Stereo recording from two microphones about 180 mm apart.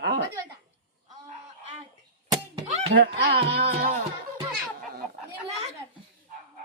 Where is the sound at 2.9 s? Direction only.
60° right (ahead or behind).